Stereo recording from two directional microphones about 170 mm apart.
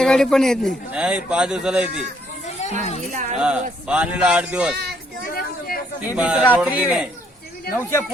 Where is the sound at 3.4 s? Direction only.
5° right (ahead or behind).